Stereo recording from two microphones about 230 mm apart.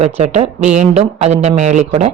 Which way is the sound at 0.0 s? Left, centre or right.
Right.